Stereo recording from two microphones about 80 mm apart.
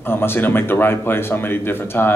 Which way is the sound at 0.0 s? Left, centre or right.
Left.